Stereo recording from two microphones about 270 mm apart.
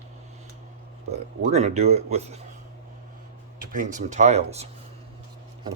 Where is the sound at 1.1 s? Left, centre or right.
Right.